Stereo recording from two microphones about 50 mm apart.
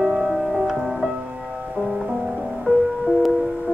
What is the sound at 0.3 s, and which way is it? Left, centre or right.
Music, centre.